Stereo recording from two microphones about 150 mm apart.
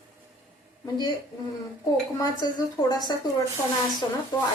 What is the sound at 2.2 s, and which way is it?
A woman's voice, 25° left (ahead or behind).